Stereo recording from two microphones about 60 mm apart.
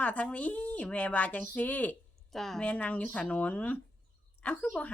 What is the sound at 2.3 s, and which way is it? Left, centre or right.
Speech, centre.